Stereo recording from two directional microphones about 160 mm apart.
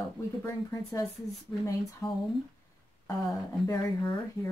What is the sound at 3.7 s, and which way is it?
Speech, 20° left (ahead or behind).